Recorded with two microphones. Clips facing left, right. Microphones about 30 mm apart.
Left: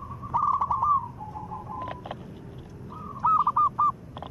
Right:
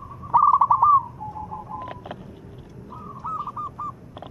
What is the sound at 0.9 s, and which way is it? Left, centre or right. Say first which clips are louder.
Bird: right 7 dB; centre.